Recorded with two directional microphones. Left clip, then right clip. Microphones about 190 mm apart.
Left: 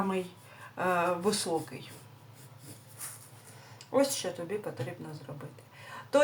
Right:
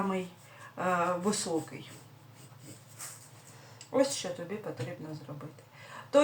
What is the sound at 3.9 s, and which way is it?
Speech, 40° left (ahead or behind).